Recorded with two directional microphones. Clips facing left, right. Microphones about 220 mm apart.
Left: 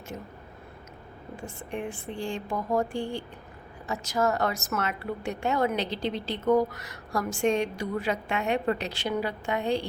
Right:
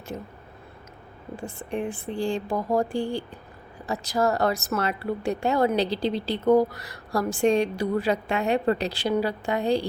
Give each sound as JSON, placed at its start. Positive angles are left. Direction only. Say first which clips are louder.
{"t": 1.4, "sound": "a woman's voice", "louder": "right 5 dB", "side_deg": -35}